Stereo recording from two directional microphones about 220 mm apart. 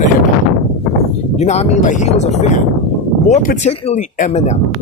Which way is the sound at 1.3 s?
30° left (ahead or behind).